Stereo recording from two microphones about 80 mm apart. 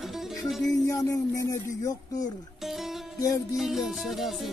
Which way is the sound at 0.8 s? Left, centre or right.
Left.